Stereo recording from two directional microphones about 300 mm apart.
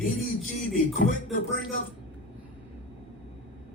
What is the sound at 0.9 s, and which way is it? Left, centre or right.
Speech, left.